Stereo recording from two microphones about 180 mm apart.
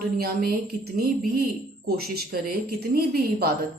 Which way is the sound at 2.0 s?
60° right (ahead or behind).